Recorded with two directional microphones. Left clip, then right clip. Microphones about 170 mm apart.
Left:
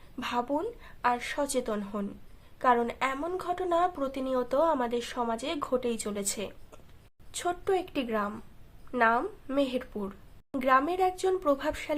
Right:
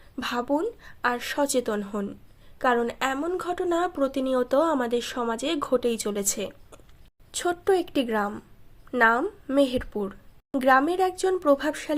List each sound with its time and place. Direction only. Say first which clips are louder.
0.2 s a woman's voice: right 4 dB; 35° right (ahead or behind)